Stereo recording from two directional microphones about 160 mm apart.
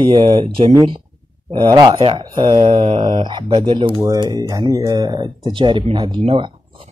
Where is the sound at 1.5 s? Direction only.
25° right (ahead or behind).